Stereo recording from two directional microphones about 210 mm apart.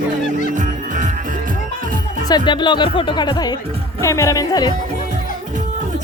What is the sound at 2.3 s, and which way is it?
Speech, 20° left (ahead or behind).